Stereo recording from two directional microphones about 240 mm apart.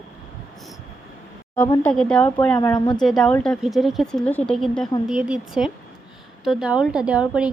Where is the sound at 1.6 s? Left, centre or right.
Centre.